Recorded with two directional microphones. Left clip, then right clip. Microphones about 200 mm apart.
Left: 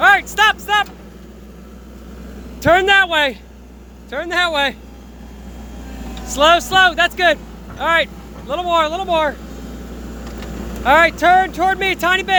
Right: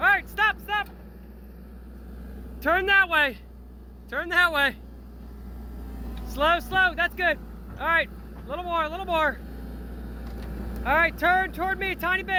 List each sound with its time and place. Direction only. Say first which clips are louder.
0.0 s a sound: left 10 dB; 30° left (ahead or behind)
2.6 s speech: left 9 dB; 20° left (ahead or behind)
6.2 s speech: left 11 dB; 20° left (ahead or behind)
9.0 s speech: left 7 dB; 15° left (ahead or behind)
10.8 s speech: left 10 dB; 25° left (ahead or behind)